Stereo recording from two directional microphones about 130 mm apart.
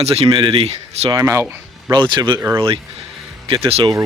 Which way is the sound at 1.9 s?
40° right (ahead or behind).